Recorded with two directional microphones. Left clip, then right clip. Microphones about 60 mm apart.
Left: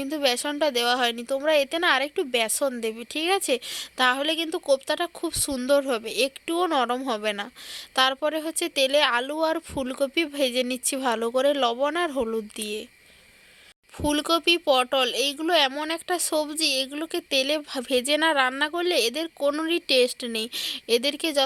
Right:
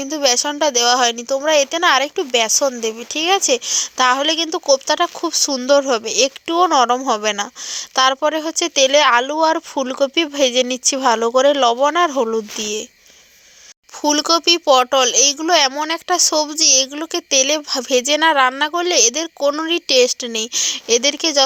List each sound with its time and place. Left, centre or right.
0.0 s a woman's voice: right
6.7 s speech: centre
7.1 s a woman's voice: centre
14.0 s a woman's voice: right; by 21.4 s centre